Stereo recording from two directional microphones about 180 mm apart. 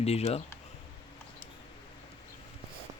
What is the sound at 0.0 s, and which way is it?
Speech, 35° left (ahead or behind).